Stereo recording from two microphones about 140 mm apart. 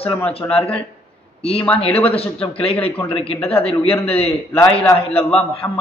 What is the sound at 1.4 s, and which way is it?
A man's voice, 45° left (ahead or behind).